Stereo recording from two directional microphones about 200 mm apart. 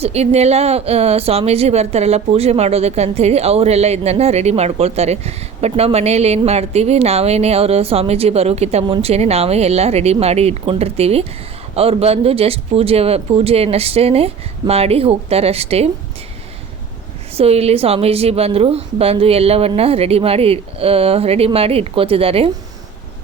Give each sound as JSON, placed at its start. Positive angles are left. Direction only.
{"t": 0.0, "sound": "a woman's voice", "side_deg": -30}
{"t": 17.3, "sound": "a woman's voice", "side_deg": -30}